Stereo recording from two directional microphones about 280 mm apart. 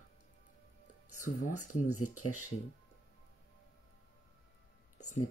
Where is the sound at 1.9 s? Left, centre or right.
Left.